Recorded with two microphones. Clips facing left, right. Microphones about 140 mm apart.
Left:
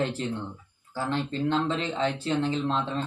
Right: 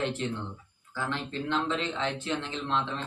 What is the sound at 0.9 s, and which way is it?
Speech, 35° left (ahead or behind).